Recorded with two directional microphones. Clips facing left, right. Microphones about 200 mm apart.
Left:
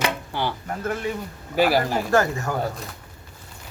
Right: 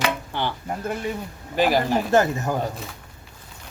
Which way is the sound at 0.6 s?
15° right (ahead or behind).